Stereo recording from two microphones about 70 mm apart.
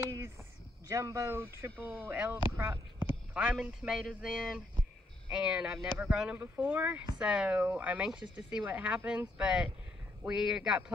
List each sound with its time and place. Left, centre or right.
0.0 s a sound: right
0.8 s speech: right
1.9 s speech: right
3.3 s a man's voice: centre
5.3 s speech: centre
6.3 s speech: right
7.2 s speech: centre
8.0 s speech: centre